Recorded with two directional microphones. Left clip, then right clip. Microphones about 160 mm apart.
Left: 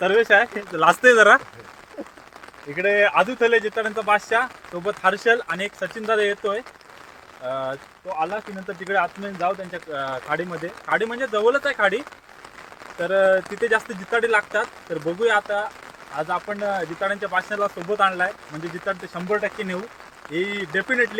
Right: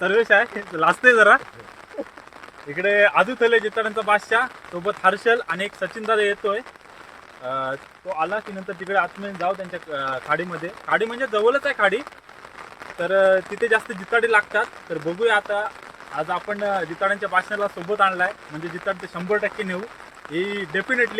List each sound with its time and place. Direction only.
0.0 s speech: 65° left (ahead or behind)
2.7 s speech: 15° left (ahead or behind)